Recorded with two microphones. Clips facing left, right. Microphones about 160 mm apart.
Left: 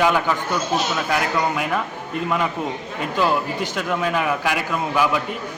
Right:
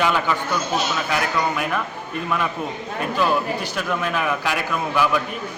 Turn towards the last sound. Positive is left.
turn(degrees=15)  # may be behind; listen again after turning